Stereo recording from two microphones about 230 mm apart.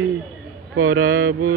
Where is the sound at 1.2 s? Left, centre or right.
Right.